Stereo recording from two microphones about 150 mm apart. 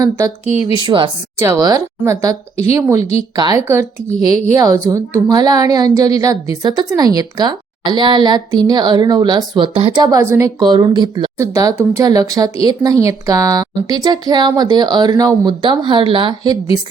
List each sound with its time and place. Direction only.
0.0 s a woman's voice: 25° right (ahead or behind)
1.4 s a woman's voice: 20° right (ahead or behind)
10.6 s a woman's voice: 30° right (ahead or behind)